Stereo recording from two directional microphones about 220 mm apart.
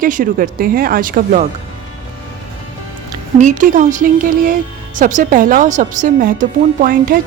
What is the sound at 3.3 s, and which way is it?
Speech, 35° right (ahead or behind).